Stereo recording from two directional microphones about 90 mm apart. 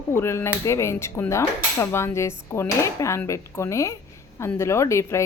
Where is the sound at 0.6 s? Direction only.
35° left (ahead or behind).